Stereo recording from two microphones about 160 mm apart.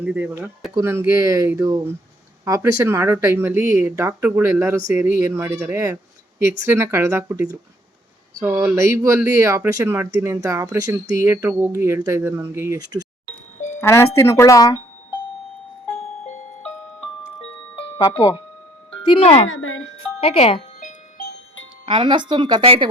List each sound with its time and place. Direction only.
0.0 s speech: 10° right (ahead or behind)
13.7 s speech: 15° left (ahead or behind)
17.9 s speech: 20° left (ahead or behind)
19.0 s speech: 35° left (ahead or behind)
21.8 s speech: 30° right (ahead or behind)